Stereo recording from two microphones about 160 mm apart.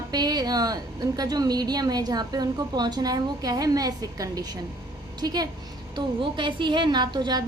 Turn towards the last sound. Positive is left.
turn(degrees=-25)  # may be behind; listen again after turning